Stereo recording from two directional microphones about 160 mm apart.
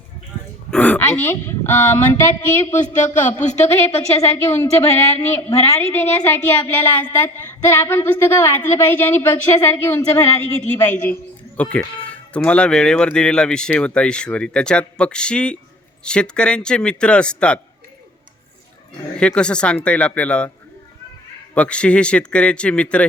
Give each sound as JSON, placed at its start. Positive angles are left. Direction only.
{"t": 0.7, "sound": "speech", "side_deg": 10}
{"t": 2.7, "sound": "speech", "side_deg": 50}
{"t": 4.4, "sound": "a woman's voice", "side_deg": 15}
{"t": 19.1, "sound": "a woman's voice", "side_deg": 5}
{"t": 21.5, "sound": "a woman's voice", "side_deg": 5}